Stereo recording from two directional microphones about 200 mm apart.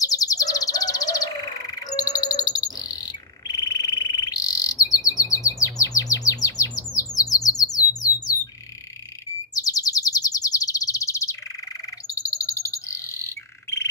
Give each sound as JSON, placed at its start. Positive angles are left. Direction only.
{"t": 0.0, "sound": "bird", "side_deg": 20}
{"t": 9.5, "sound": "chirp", "side_deg": 20}
{"t": 12.1, "sound": "bird", "side_deg": 15}